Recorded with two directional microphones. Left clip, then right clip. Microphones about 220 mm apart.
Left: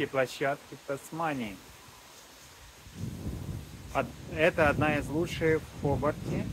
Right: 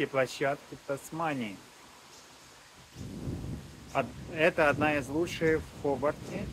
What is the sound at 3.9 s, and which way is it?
Speech, 5° right (ahead or behind).